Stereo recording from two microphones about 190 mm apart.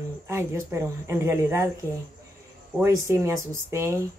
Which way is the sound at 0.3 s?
15° right (ahead or behind).